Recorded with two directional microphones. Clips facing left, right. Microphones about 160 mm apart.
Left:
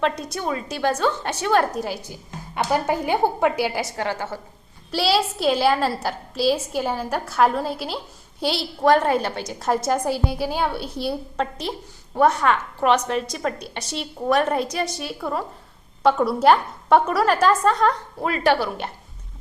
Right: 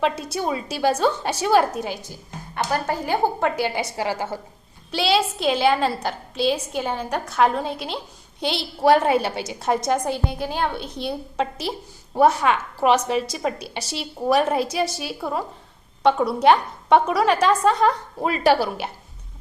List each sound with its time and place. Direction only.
0.0 s a woman's voice: 5° right (ahead or behind)
3.1 s a woman's voice: 10° left (ahead or behind); by 4.4 s 10° right (ahead or behind)
4.9 s a woman's voice: 5° left (ahead or behind)
18.2 s a woman's voice: 20° right (ahead or behind)